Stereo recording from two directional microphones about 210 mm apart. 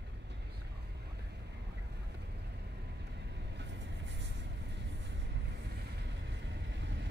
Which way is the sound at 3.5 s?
55° right (ahead or behind).